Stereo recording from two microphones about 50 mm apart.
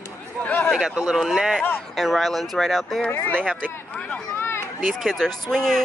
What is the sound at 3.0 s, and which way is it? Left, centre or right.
Speech, left.